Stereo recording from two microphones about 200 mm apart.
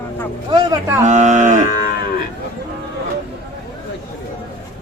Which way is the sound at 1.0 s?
35° right (ahead or behind).